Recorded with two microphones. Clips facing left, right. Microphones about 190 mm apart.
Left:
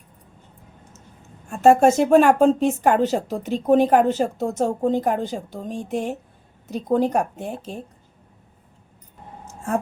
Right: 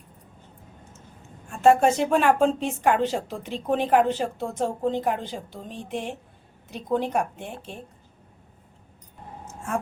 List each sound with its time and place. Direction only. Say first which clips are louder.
1.5 s a woman's voice: left 4 dB; 45° left (ahead or behind)